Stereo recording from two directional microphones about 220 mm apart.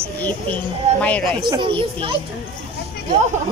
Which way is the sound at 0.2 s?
5° left (ahead or behind).